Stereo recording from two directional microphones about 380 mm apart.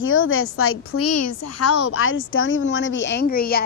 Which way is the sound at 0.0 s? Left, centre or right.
Left.